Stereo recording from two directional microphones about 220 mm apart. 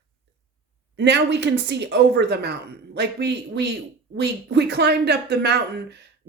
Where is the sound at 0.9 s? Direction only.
50° right (ahead or behind).